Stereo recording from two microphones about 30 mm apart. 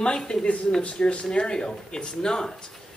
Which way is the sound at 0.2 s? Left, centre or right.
Left.